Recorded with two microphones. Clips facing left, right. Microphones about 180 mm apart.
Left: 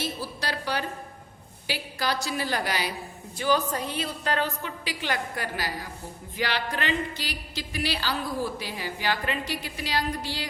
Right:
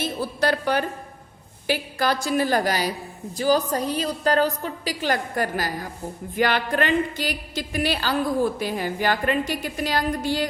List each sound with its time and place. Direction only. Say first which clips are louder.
0.0 s a woman's voice: right 8 dB; 55° right (ahead or behind)